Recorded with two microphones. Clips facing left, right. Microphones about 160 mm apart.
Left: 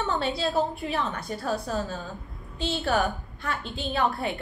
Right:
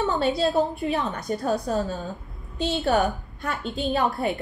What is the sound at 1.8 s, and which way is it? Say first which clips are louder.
A woman's voice: right 4 dB; centre (ahead or behind).